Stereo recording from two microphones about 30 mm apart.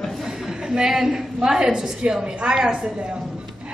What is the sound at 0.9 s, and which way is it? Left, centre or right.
A woman's voice, centre.